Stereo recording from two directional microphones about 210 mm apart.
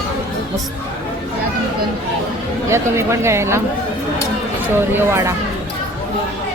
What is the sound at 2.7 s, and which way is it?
Speech, 15° right (ahead or behind).